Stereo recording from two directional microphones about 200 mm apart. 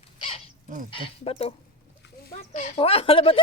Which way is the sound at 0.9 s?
30° left (ahead or behind).